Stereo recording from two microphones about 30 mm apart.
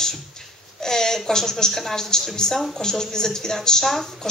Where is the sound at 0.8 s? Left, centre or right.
Centre.